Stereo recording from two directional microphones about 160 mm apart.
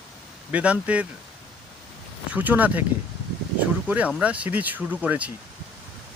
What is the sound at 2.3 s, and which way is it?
Speech, 10° right (ahead or behind).